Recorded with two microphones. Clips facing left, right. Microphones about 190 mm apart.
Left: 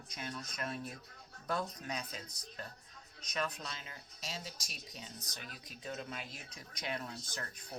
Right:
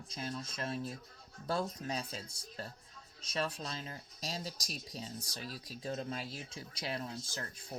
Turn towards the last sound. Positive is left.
turn(degrees=-30)  # may be behind; listen again after turning